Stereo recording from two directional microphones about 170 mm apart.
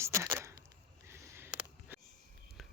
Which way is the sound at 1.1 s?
15° right (ahead or behind).